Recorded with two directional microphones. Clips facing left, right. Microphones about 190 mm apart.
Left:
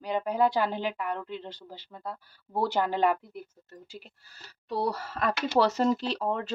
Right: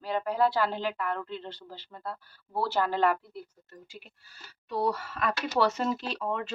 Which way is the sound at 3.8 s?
35° left (ahead or behind).